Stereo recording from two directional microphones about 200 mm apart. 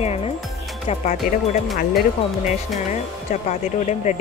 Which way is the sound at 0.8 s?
35° left (ahead or behind).